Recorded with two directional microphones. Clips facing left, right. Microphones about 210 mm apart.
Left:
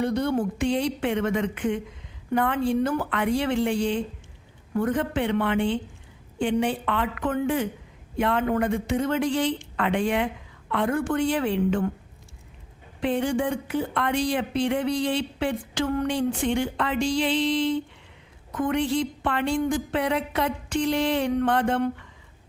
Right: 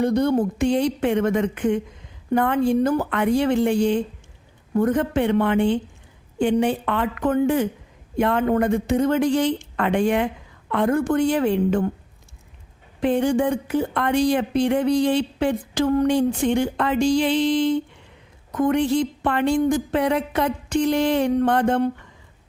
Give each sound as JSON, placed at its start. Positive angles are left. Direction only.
{"t": 0.0, "sound": "speech", "side_deg": -40}
{"t": 13.0, "sound": "speech", "side_deg": -45}